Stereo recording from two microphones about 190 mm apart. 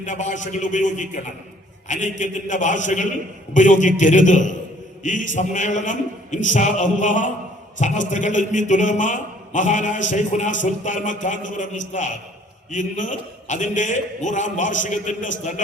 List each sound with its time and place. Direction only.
0.0 s a man's voice: 40° left (ahead or behind)